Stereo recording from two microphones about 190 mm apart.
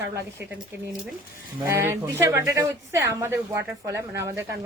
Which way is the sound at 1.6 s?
15° right (ahead or behind).